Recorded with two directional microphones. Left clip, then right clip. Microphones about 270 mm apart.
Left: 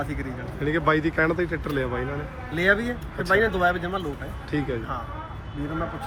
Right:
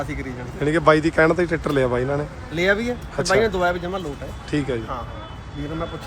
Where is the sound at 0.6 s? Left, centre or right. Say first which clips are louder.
Right 6 dB; centre.